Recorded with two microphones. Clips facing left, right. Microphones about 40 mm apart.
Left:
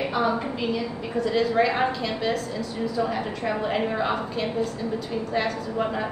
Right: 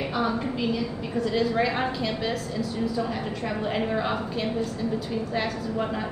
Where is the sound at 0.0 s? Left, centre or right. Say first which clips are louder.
Left 2 dB; centre.